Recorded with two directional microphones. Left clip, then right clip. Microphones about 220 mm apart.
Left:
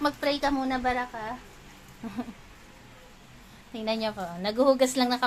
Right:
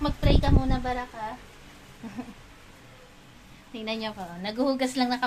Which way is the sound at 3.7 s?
15° left (ahead or behind).